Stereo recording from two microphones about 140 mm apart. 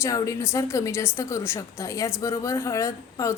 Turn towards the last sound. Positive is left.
turn(degrees=20)  # may be behind; listen again after turning